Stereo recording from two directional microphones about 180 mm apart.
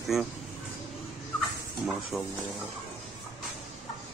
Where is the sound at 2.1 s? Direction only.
Centre (ahead or behind).